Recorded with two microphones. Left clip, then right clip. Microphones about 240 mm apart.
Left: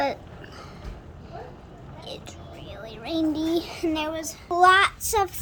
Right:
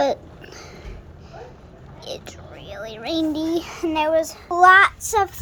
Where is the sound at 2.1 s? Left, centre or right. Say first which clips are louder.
Right 4 dB; centre.